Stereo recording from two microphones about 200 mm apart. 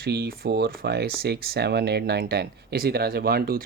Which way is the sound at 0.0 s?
55° right (ahead or behind).